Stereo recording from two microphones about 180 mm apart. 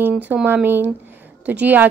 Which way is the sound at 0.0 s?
10° right (ahead or behind).